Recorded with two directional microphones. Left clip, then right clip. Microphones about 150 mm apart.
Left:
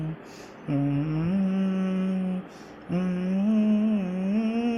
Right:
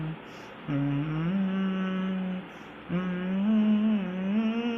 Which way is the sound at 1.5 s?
20° left (ahead or behind).